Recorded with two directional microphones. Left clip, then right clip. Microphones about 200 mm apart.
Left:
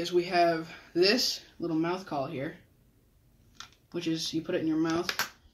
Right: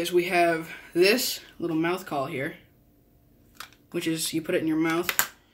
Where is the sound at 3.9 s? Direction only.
15° right (ahead or behind).